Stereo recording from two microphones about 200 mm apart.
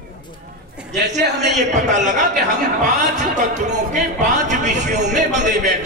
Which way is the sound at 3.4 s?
35° right (ahead or behind).